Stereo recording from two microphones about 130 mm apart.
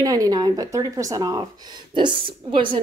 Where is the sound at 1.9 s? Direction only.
40° right (ahead or behind).